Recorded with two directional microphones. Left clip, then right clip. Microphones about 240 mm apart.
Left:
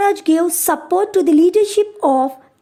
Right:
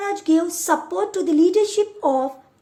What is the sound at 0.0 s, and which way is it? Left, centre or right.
A woman's voice, left.